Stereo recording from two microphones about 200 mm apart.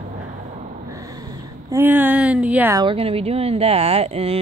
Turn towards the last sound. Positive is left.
turn(degrees=-30)  # may be behind; listen again after turning